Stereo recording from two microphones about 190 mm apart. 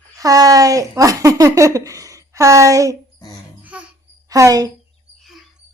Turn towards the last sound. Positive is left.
turn(degrees=-15)  # may be behind; listen again after turning